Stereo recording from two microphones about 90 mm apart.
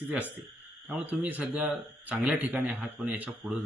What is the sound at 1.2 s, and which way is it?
A man's voice, 15° right (ahead or behind).